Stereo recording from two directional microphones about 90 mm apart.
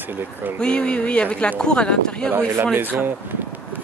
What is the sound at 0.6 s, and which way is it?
Speech, 10° left (ahead or behind).